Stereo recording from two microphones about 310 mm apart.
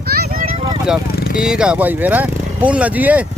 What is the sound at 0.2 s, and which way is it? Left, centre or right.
Vehicle, right.